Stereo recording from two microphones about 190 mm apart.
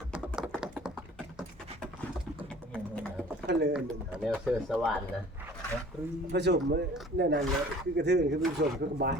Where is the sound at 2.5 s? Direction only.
5° left (ahead or behind).